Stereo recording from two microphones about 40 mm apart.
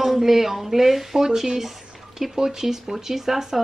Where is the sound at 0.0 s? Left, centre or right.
Centre.